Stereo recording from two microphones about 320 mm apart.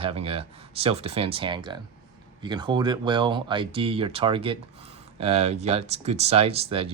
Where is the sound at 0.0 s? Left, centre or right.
Centre.